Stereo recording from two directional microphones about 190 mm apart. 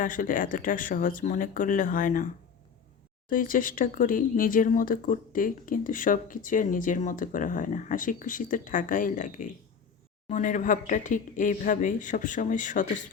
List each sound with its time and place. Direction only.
0.0 s speech: 45° left (ahead or behind)
3.2 s speech: 45° left (ahead or behind)